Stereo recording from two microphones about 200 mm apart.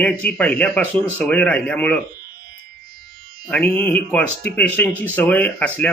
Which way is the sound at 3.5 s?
5° left (ahead or behind).